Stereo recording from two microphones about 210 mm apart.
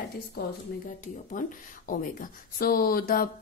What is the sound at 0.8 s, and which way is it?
Speech, 40° left (ahead or behind).